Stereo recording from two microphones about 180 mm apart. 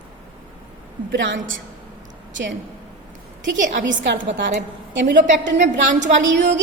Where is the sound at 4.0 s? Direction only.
80° right.